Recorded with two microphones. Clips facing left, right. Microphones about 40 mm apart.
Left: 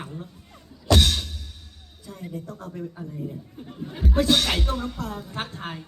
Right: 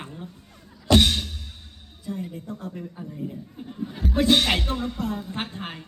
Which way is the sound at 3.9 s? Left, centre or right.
Centre.